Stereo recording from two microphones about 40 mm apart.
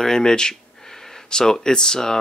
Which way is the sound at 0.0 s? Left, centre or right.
Centre.